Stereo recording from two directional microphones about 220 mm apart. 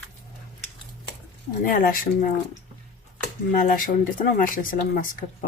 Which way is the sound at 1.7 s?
40° left (ahead or behind).